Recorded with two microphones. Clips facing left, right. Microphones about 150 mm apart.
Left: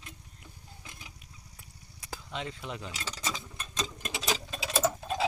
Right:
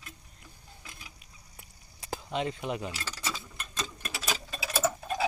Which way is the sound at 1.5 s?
20° right (ahead or behind).